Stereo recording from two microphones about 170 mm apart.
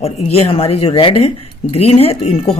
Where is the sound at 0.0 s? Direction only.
35° left (ahead or behind).